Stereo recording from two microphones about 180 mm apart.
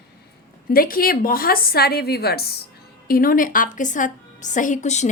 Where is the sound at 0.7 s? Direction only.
55° left (ahead or behind).